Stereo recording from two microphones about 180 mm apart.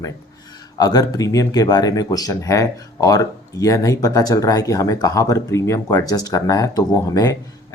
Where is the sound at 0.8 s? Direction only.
20° left (ahead or behind).